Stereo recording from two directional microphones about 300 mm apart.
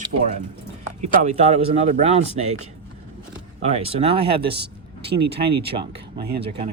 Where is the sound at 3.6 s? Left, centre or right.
Centre.